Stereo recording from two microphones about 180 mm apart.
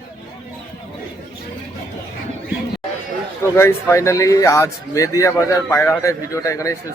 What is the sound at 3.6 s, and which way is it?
A man's voice, 15° left (ahead or behind).